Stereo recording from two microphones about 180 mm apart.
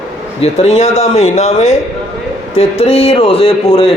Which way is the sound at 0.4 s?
35° left (ahead or behind).